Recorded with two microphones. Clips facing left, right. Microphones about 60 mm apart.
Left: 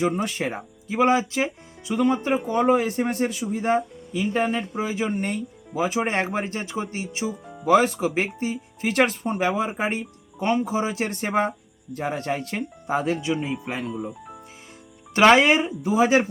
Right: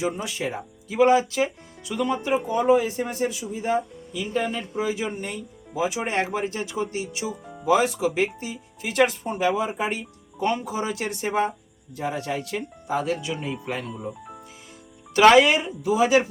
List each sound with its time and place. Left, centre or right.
0.0 s speech: left
0.9 s speech: left
2.5 s speech: left
4.1 s speech: left
5.1 s speech: left
7.6 s speech: left
9.5 s speech: left
11.0 s speech: left
13.1 s speech: centre
13.9 s speech: centre
15.2 s speech: left